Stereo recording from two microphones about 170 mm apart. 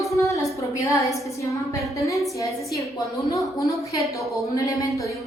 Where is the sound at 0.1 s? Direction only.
20° left (ahead or behind).